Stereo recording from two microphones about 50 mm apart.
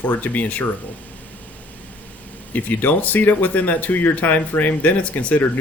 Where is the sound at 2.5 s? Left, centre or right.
Left.